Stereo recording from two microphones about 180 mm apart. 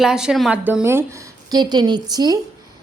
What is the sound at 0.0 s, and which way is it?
A woman's voice, 5° right (ahead or behind).